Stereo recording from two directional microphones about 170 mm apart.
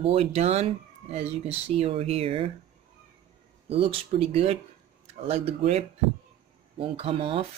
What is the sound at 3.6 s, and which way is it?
Speech, 35° right (ahead or behind).